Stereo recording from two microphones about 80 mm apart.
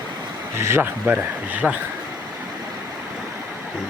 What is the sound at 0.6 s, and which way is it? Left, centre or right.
Speech, right.